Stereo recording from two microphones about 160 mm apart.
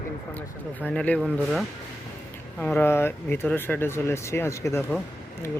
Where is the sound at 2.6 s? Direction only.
10° left (ahead or behind).